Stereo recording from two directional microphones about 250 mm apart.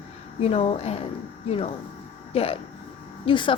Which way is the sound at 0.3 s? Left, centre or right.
Left.